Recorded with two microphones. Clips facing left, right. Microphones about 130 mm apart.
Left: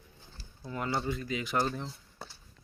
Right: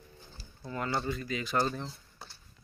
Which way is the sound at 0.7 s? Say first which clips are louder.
Even; 10° left (ahead or behind).